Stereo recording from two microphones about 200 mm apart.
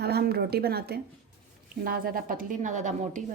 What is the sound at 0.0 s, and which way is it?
A woman's voice, 50° right (ahead or behind).